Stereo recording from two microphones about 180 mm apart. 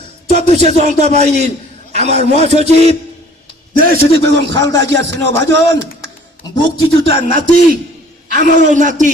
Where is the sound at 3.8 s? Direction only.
65° right (ahead or behind).